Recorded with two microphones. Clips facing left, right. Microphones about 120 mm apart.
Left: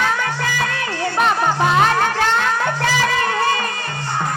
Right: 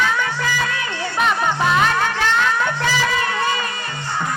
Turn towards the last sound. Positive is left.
turn(degrees=50)  # may be behind; listen again after turning